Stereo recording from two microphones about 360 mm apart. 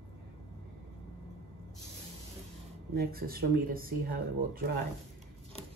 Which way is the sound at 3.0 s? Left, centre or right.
Right.